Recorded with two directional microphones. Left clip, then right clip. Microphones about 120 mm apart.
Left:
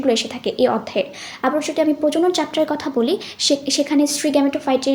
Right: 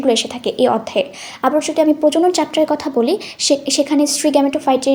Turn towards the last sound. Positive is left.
turn(degrees=-35)  # may be behind; listen again after turning